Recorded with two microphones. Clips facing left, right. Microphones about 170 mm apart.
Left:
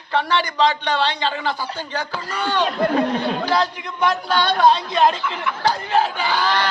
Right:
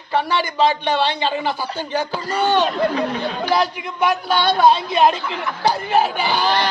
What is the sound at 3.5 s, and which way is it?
A man's voice, 15° right (ahead or behind).